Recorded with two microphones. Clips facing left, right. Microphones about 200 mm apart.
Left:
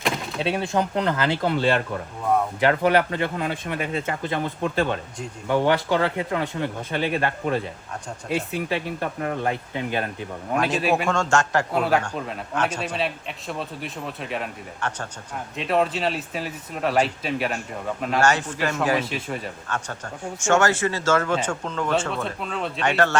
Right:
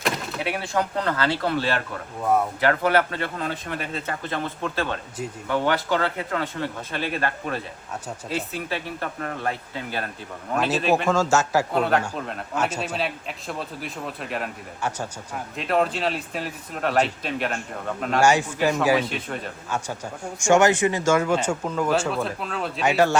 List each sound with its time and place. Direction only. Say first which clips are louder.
0.3 s speech: left 4 dB; 25° left (ahead or behind)
10.8 s a man's voice: right 4 dB; centre (ahead or behind)
18.2 s a man's voice: right 3 dB; 10° right (ahead or behind)